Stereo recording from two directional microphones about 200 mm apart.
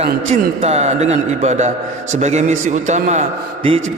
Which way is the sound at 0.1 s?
35° right (ahead or behind).